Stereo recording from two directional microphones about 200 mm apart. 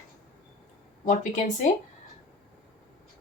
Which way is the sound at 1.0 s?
40° left (ahead or behind).